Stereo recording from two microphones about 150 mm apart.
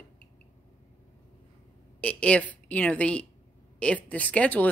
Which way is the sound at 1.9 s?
10° left (ahead or behind).